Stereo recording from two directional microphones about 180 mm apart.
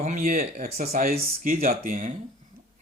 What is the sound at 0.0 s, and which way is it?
Speech, 45° right (ahead or behind).